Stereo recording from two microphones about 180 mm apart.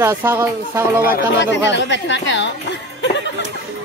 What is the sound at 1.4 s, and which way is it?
Speech, 85° left.